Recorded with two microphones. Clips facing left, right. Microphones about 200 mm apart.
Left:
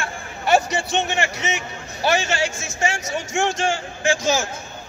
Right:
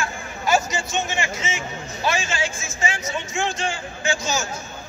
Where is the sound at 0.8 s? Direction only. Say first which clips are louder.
Left 3 dB; 65° left (ahead or behind).